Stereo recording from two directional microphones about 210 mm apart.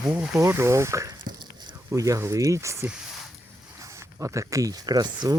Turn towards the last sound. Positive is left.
turn(degrees=-20)  # may be behind; listen again after turning